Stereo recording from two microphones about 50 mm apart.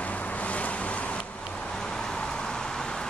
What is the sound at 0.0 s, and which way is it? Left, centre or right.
Vehicle, left.